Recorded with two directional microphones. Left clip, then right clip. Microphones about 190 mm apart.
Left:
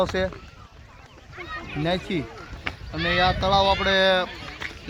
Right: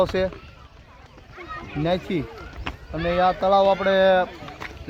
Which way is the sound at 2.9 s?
50° right (ahead or behind).